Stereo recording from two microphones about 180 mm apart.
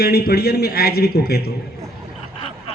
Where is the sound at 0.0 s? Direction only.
60° left (ahead or behind).